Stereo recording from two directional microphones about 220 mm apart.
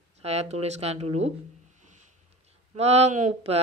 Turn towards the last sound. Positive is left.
turn(degrees=-30)  # may be behind; listen again after turning